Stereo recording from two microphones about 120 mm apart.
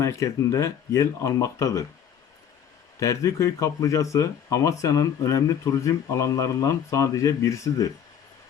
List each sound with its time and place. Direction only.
0.0 s speech: 25° left (ahead or behind)
3.0 s speech: 25° left (ahead or behind)